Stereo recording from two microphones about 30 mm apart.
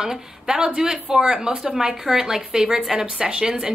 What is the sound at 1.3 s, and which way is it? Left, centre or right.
Speech, right.